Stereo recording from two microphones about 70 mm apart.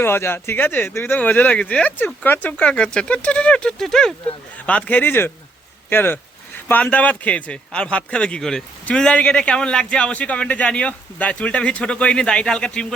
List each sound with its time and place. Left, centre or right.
0.0 s a man's voice: left; by 4.1 s centre
4.5 s a man's voice: centre